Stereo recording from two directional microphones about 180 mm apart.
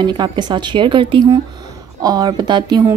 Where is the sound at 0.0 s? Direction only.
25° right (ahead or behind).